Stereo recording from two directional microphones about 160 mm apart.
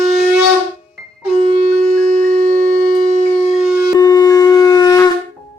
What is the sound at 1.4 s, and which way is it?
Wind instrument, 50° right (ahead or behind).